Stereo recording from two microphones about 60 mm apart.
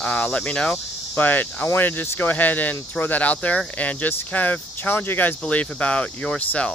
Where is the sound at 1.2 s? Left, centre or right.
Left.